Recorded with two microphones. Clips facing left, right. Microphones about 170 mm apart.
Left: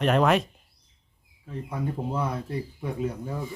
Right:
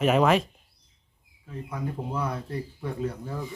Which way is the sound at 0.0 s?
5° right (ahead or behind).